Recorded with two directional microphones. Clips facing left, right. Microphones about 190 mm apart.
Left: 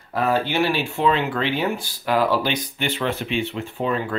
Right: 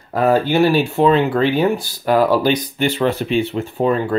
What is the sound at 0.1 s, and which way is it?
Speech, 40° right (ahead or behind).